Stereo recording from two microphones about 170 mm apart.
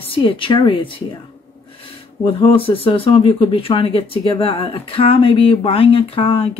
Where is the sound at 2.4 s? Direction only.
30° left (ahead or behind).